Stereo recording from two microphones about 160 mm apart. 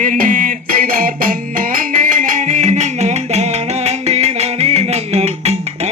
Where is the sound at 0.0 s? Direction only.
55° right (ahead or behind).